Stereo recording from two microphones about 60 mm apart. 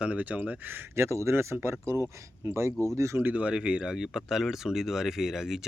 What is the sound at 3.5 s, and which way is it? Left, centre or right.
Speech, centre.